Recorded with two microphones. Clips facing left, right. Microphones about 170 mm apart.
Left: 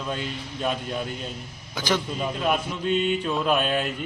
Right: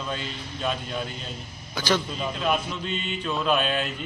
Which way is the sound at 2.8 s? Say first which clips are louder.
Left 8 dB; 55° left (ahead or behind).